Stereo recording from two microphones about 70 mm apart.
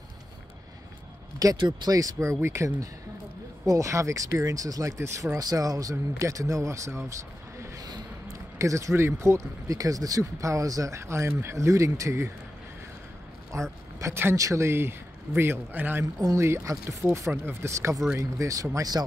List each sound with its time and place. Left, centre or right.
1.4 s speech: right
8.5 s speech: right
13.5 s speech: right
16.3 s speech: right